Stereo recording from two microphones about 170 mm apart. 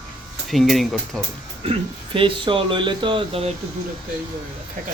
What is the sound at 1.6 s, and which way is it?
Speech, 35° right (ahead or behind).